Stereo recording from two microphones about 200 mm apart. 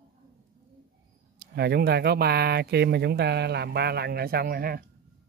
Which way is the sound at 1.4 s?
55° right (ahead or behind).